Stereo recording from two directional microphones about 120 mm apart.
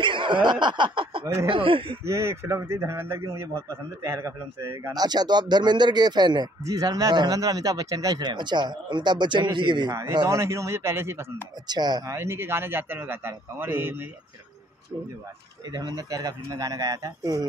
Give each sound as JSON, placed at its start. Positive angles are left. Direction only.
{"t": 0.0, "sound": "speech", "side_deg": -40}
{"t": 1.2, "sound": "a man's voice", "side_deg": -25}
{"t": 1.5, "sound": "speech", "side_deg": -45}
{"t": 2.0, "sound": "a man's voice", "side_deg": -25}
{"t": 4.9, "sound": "speech", "side_deg": -35}
{"t": 10.4, "sound": "a man's voice", "side_deg": -25}
{"t": 11.6, "sound": "speech", "side_deg": -35}
{"t": 12.1, "sound": "a man's voice", "side_deg": -20}
{"t": 15.7, "sound": "a man's voice", "side_deg": -30}